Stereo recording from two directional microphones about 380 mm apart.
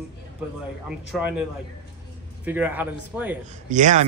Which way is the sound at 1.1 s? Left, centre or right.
Centre.